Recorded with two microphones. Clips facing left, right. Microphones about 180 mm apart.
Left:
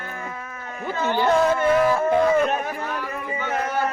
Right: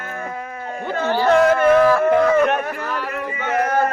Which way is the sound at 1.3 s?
75° right (ahead or behind).